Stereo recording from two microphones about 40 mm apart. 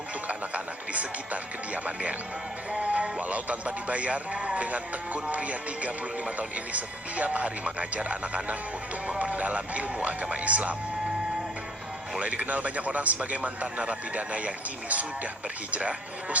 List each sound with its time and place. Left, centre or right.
0.3 s speech: right
2.7 s music: right
3.8 s a man's voice: right
9.0 s music: right
9.3 s a man's voice: right
12.2 s a man's voice: right